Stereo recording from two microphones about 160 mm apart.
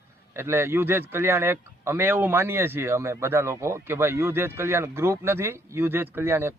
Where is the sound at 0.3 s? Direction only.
15° right (ahead or behind).